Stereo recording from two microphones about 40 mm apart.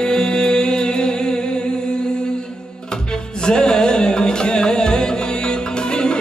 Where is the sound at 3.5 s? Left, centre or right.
Centre.